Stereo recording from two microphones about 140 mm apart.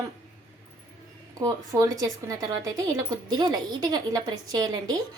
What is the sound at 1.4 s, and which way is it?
A woman's voice, 25° right (ahead or behind).